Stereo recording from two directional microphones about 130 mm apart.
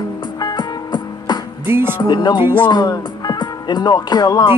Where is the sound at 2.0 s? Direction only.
35° left (ahead or behind).